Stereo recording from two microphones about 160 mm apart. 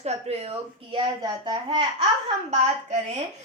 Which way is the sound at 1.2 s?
25° right (ahead or behind).